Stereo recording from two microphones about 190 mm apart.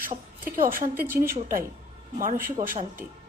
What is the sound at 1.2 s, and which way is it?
A woman's voice, 50° right (ahead or behind).